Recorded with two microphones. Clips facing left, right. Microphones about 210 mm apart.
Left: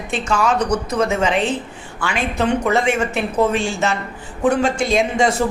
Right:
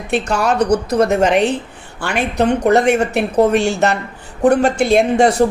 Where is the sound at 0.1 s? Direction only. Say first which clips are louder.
Right 2 dB; 65° right (ahead or behind).